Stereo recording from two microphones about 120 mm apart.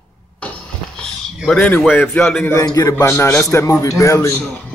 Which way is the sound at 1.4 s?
10° left (ahead or behind).